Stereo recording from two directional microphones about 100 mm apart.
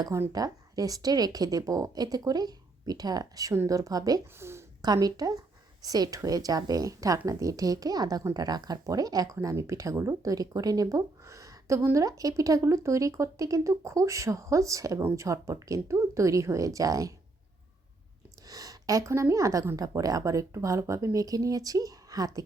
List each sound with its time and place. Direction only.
0.3 s speech: 40° right (ahead or behind)
4.4 s a woman's voice: 25° right (ahead or behind)
4.8 s speech: 40° right (ahead or behind)
18.4 s speech: 40° right (ahead or behind)